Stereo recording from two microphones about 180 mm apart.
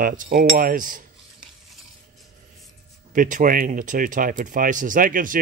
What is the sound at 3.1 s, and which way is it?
Speech, 45° right (ahead or behind).